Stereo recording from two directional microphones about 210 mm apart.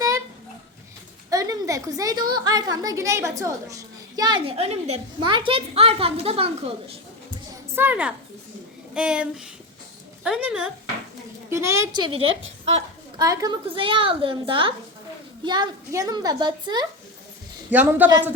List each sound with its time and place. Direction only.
1.3 s a sound: 15° right (ahead or behind)
2.3 s a woman's voice: 20° right (ahead or behind)
7.8 s a woman's voice: 10° right (ahead or behind)
12.2 s a woman's voice: 70° right (ahead or behind)
13.1 s a woman's voice: 15° right (ahead or behind)
17.7 s a woman's voice: 10° right (ahead or behind)